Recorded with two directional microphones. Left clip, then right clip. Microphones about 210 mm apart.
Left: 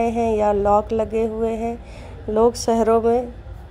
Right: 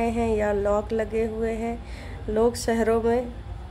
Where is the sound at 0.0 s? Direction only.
15° left (ahead or behind).